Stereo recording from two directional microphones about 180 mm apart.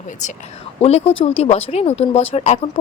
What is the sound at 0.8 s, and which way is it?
Speech, 35° left (ahead or behind).